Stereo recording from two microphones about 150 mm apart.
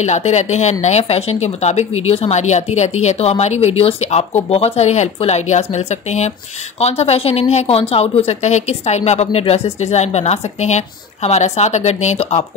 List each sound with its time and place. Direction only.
0.0 s speech: 50° left (ahead or behind)